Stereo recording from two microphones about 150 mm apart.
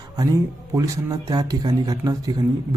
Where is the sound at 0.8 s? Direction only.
25° right (ahead or behind).